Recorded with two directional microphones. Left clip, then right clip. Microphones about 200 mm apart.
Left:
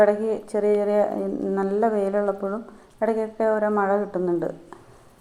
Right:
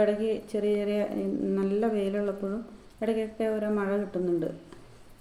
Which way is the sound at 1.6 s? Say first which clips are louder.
Left 7 dB; 25° right (ahead or behind).